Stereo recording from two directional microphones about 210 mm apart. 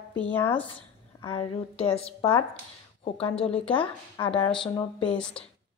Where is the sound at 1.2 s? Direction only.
25° left (ahead or behind).